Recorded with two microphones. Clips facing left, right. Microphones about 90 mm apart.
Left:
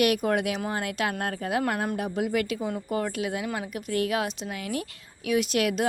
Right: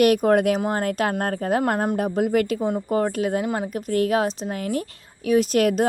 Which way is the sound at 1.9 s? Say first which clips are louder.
Right 6 dB; 45° right (ahead or behind).